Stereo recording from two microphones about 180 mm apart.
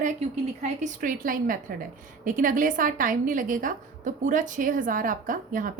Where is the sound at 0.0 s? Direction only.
40° right (ahead or behind).